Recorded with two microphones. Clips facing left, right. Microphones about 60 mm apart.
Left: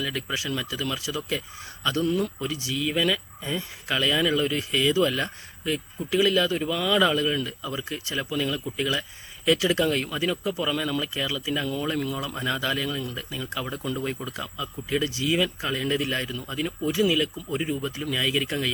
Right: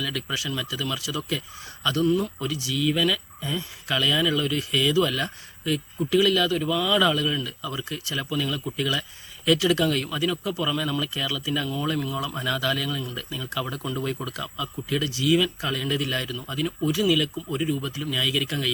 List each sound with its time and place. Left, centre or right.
0.0 s speech: left